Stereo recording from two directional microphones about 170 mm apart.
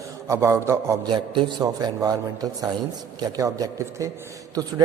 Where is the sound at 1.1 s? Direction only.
30° right (ahead or behind).